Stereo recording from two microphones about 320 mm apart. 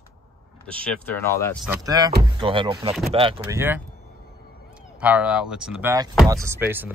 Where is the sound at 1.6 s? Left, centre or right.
Centre.